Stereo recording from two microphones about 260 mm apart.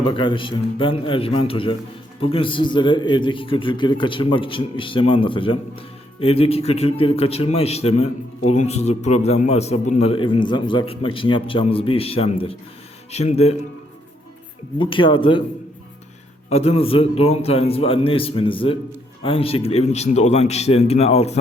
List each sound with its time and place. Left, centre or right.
0.0 s a man's voice: centre
14.8 s a man's voice: centre
16.5 s a man's voice: left